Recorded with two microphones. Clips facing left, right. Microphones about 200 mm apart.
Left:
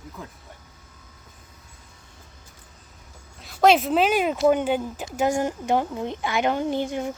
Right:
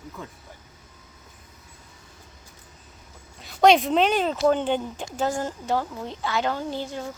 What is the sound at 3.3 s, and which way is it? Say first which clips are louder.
A woman's voice: right 1 dB; centre (ahead or behind).